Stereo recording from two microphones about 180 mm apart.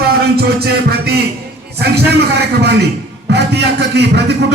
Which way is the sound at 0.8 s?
60° right (ahead or behind).